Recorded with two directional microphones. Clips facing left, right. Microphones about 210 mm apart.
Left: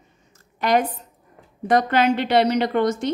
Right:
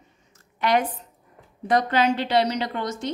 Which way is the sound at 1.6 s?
55° left (ahead or behind).